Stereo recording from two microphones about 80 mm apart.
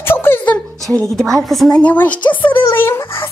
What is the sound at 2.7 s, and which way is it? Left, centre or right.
Speech, left.